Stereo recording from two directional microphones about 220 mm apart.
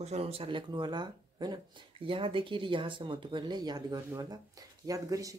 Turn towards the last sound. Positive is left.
turn(degrees=-15)  # may be behind; listen again after turning